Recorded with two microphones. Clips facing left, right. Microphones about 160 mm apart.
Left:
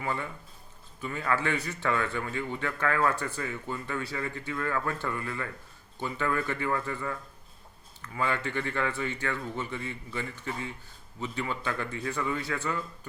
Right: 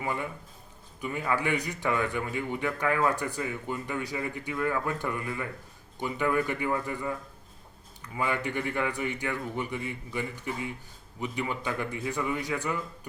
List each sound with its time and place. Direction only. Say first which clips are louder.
0.0 s a man's voice: right 1 dB; 15° right (ahead or behind)